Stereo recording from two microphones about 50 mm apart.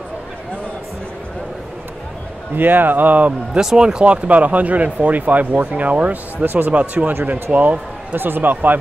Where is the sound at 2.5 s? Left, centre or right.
Right.